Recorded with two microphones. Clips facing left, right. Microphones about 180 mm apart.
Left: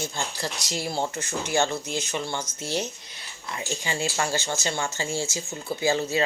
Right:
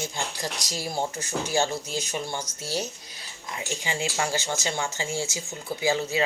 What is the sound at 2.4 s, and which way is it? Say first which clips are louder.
Speech: left 2 dB; 40° right (ahead or behind).